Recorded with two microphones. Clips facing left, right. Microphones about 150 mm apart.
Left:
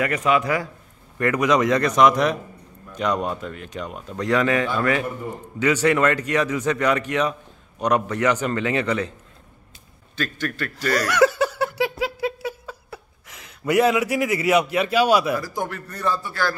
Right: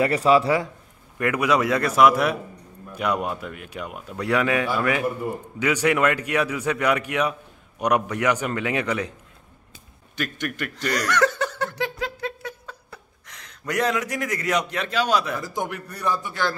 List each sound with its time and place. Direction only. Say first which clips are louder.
0.0 s a man's voice: right 3 dB; 30° right (ahead or behind)
1.1 s speech: left 2 dB; 10° right (ahead or behind)
10.1 s speech: left 2 dB; 15° right (ahead or behind)
11.1 s a sound: left 4 dB; 10° left (ahead or behind)
15.4 s speech: even; 20° right (ahead or behind)